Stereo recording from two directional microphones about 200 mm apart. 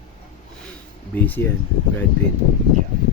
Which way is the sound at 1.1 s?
10° left (ahead or behind).